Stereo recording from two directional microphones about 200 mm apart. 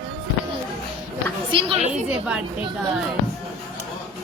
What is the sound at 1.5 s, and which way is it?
Speech, 25° right (ahead or behind).